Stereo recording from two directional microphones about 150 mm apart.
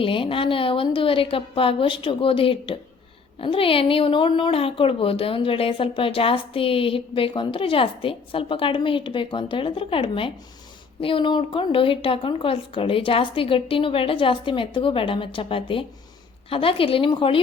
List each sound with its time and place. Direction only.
0.0 s speech: 35° left (ahead or behind)